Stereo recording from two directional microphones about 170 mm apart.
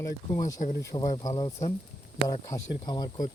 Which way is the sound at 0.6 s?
65° left (ahead or behind).